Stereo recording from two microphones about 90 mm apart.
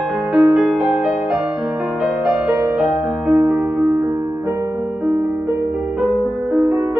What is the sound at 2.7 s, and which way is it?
Music, 15° right (ahead or behind).